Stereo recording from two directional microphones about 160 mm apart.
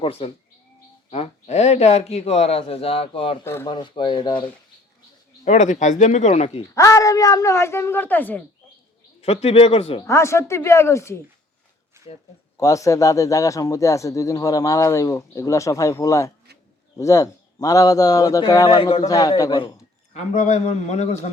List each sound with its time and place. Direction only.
0.0 s speech: 35° left (ahead or behind)
3.4 s speech: 15° left (ahead or behind)
3.7 s speech: 30° left (ahead or behind)
5.5 s speech: 45° left (ahead or behind)
6.7 s speech: 20° left (ahead or behind)
9.2 s speech: 40° left (ahead or behind)
10.1 s speech: 15° left (ahead or behind)
12.5 s speech: 20° left (ahead or behind)
18.8 s speech: 35° left (ahead or behind)
19.0 s speech: 20° left (ahead or behind)
20.1 s speech: 50° left (ahead or behind)